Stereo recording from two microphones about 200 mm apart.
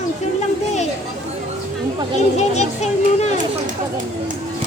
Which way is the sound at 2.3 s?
35° left (ahead or behind).